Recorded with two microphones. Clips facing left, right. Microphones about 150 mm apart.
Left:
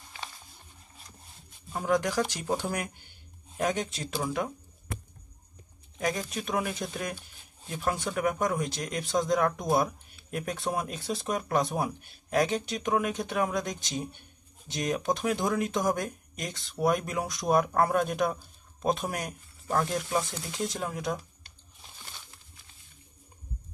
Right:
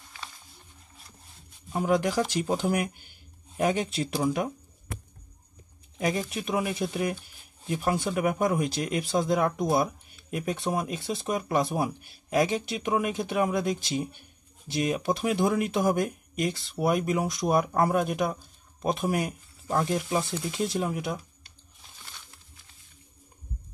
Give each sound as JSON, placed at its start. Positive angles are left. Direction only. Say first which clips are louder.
{"t": 1.7, "sound": "speech", "louder": "right 2 dB", "side_deg": -15}
{"t": 5.9, "sound": "speech", "louder": "right 3 dB", "side_deg": -10}